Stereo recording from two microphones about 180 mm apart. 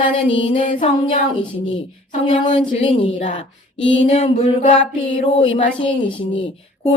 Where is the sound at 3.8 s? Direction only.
90° left.